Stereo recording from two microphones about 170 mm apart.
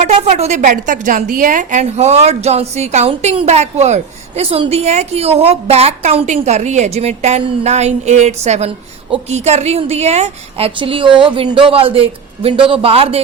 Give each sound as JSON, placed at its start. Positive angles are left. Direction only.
{"t": 0.0, "sound": "a woman's voice", "side_deg": -40}